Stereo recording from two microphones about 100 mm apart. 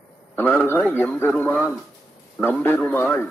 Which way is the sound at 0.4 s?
20° left (ahead or behind).